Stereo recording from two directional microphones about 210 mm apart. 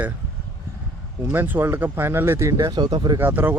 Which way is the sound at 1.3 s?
10° right (ahead or behind).